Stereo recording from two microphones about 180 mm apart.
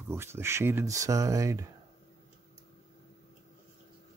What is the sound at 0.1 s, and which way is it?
Speech, 15° right (ahead or behind).